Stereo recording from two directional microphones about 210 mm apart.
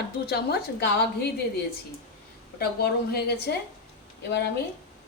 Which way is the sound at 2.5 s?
50° left (ahead or behind).